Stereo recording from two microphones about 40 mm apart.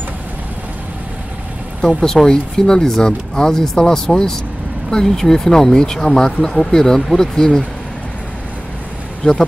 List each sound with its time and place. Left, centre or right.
2.0 s speech: centre
9.2 s speech: centre